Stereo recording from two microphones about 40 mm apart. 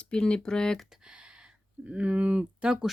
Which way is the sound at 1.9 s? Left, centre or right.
Right.